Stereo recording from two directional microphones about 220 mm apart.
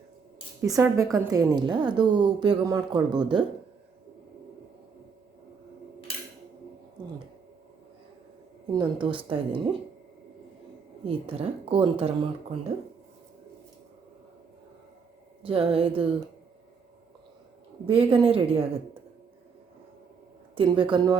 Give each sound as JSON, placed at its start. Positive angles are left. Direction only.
{"t": 0.6, "sound": "a woman's voice", "side_deg": -15}
{"t": 8.7, "sound": "speech", "side_deg": -20}
{"t": 11.0, "sound": "speech", "side_deg": -25}
{"t": 15.4, "sound": "speech", "side_deg": -25}
{"t": 17.8, "sound": "speech", "side_deg": -25}
{"t": 20.6, "sound": "speech", "side_deg": -20}